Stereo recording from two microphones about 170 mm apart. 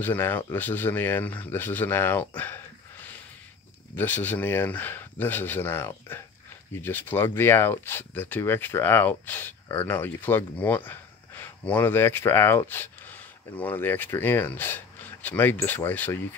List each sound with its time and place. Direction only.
0.0 s speech: 10° left (ahead or behind)
3.9 s speech: 10° left (ahead or behind)